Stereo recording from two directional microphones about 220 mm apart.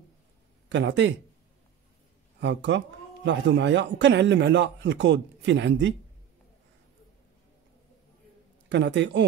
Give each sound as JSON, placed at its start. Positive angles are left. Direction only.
{"t": 0.7, "sound": "speech", "side_deg": -55}
{"t": 2.4, "sound": "a man's voice", "side_deg": -55}
{"t": 8.6, "sound": "speech", "side_deg": -55}